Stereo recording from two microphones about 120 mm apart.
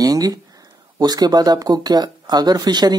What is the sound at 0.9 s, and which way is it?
Speech, 35° right (ahead or behind).